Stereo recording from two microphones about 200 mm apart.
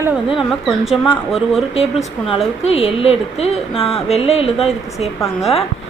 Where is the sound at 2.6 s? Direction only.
30° left (ahead or behind).